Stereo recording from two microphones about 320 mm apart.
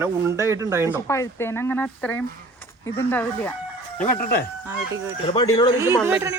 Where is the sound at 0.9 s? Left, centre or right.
Centre.